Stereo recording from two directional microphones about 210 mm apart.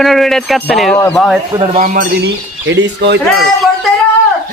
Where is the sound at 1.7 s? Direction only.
45° right (ahead or behind).